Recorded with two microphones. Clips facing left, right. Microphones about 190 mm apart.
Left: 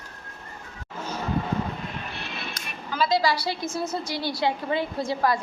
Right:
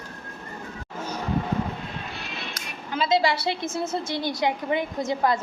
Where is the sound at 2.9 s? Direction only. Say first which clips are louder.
Right 1 dB; 25° right (ahead or behind).